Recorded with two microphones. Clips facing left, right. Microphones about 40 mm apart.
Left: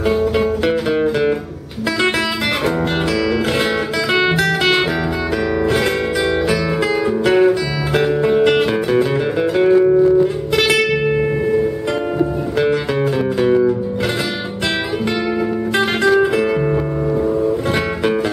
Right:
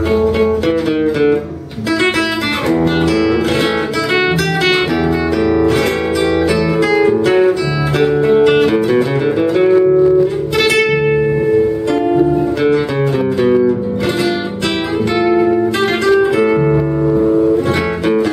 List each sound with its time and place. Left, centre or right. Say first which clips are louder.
8.0 s music: right 4 dB; centre
13.4 s music: right 2 dB; centre